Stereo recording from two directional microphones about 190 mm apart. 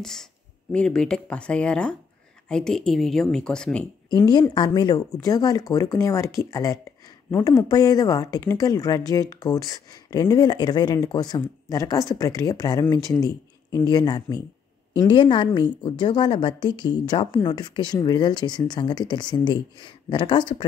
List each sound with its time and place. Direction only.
0.0 s speech: centre (ahead or behind)
4.3 s a woman's voice: 20° left (ahead or behind)